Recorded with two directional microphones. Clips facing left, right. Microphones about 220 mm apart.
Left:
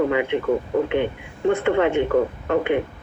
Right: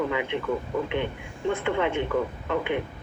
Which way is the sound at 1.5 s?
65° left (ahead or behind).